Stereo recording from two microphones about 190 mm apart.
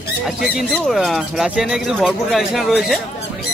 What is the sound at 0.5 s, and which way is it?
Speech, centre (ahead or behind).